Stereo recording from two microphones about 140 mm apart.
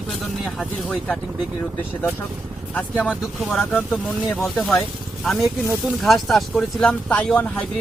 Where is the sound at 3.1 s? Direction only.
Centre (ahead or behind).